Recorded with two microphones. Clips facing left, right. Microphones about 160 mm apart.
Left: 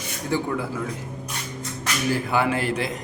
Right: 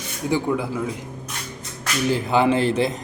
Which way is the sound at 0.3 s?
15° right (ahead or behind).